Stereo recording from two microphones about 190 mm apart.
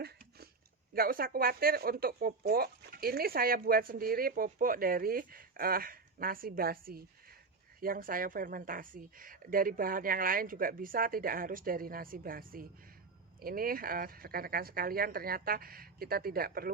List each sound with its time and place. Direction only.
0.9 s speech: 50° right (ahead or behind)